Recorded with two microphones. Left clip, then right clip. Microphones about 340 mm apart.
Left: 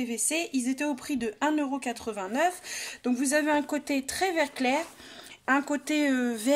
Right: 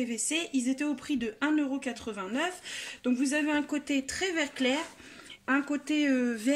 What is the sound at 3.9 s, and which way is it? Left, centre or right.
Speech, left.